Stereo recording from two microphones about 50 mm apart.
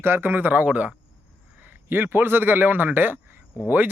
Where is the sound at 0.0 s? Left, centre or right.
Right.